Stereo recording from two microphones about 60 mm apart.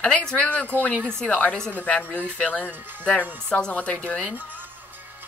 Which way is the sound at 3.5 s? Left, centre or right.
Centre.